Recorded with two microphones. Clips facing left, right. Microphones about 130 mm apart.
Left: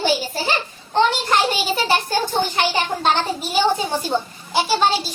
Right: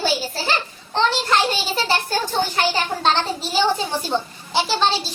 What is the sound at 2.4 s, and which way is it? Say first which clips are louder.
Speech: right 1 dB; 15° left (ahead or behind).